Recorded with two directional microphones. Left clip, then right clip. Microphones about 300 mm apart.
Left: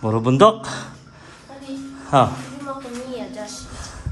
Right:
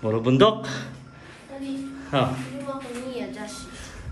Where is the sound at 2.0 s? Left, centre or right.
Centre.